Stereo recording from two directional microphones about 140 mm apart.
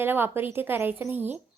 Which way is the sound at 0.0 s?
15° right (ahead or behind).